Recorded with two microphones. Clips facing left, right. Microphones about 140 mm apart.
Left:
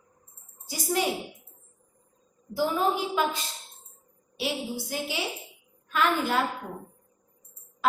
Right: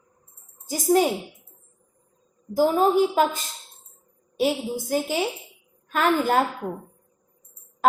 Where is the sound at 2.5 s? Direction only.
45° right (ahead or behind).